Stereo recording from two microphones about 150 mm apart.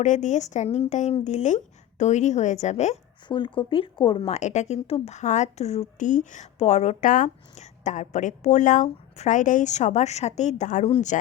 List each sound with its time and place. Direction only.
0.0 s speech: 55° left (ahead or behind)
3.2 s speech: 30° left (ahead or behind)
4.3 s speech: 50° left (ahead or behind)
6.0 s speech: 60° left (ahead or behind)